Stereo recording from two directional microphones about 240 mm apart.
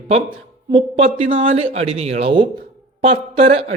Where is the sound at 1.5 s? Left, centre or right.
Right.